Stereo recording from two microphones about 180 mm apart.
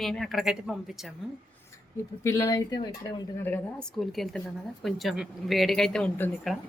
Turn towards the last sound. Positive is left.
turn(degrees=5)  # may be behind; listen again after turning